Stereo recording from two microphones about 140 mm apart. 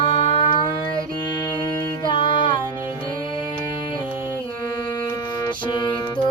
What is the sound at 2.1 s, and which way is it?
Music, 35° left (ahead or behind).